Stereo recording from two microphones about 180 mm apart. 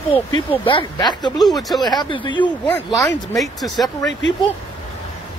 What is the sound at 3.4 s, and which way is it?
Speech, centre (ahead or behind).